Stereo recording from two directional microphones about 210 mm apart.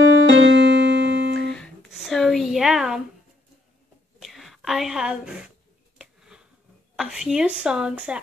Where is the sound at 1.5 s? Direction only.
Centre (ahead or behind).